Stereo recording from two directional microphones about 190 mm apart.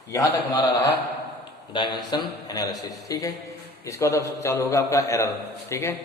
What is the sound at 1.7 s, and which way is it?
A man's voice, 25° left (ahead or behind).